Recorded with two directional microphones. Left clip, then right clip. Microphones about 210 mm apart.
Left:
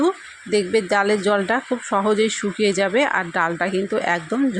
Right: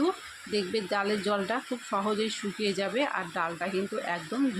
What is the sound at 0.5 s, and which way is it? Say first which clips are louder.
Speech: left 11 dB; 30° left (ahead or behind).